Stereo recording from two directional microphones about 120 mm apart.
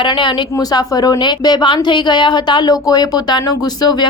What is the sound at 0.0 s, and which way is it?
A woman's voice, 40° left (ahead or behind).